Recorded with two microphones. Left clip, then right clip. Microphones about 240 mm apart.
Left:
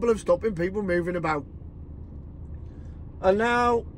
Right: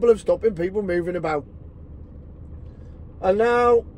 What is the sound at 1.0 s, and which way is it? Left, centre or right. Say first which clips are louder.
Speech: right 3 dB; centre.